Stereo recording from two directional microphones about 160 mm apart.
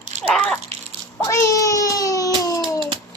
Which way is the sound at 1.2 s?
20° left (ahead or behind).